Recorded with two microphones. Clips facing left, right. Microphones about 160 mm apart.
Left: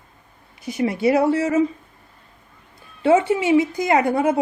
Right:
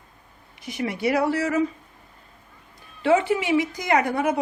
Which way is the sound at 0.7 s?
25° left (ahead or behind).